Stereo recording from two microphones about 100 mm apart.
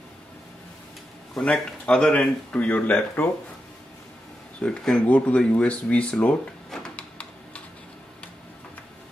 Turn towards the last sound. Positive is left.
turn(degrees=10)  # may be behind; listen again after turning